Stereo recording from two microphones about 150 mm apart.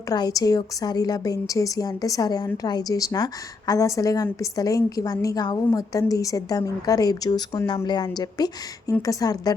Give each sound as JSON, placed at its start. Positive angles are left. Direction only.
{"t": 0.1, "sound": "a woman's voice", "side_deg": 25}